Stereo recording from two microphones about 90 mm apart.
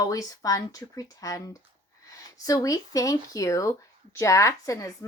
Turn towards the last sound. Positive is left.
turn(degrees=35)  # may be behind; listen again after turning